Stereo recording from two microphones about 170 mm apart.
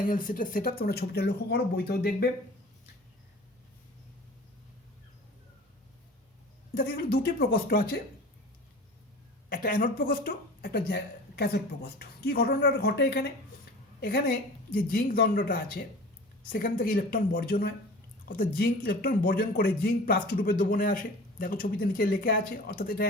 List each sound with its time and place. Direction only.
0.0 s speech: 50° left (ahead or behind); by 2.3 s 65° left (ahead or behind)
6.7 s speech: 60° left (ahead or behind)
9.5 s speech: 60° left (ahead or behind)
14.0 s speech: 60° left (ahead or behind)